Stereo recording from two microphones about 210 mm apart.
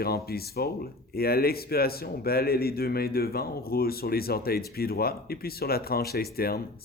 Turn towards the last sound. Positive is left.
turn(degrees=45)  # may be behind; listen again after turning